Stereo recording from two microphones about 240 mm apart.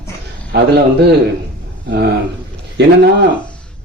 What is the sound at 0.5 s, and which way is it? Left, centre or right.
Speech, right.